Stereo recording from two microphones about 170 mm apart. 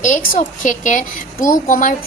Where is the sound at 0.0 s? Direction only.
45° left (ahead or behind).